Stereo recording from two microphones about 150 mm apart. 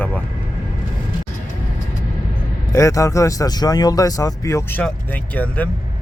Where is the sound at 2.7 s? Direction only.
20° left (ahead or behind).